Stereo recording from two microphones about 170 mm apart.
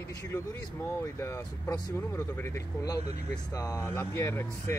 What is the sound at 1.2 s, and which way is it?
Speech, 15° left (ahead or behind).